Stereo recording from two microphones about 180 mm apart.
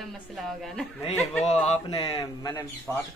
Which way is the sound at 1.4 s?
40° left (ahead or behind).